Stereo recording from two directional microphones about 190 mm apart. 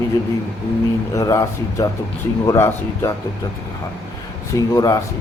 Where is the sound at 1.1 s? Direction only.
20° left (ahead or behind).